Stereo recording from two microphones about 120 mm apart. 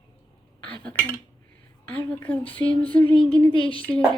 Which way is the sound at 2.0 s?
15° left (ahead or behind).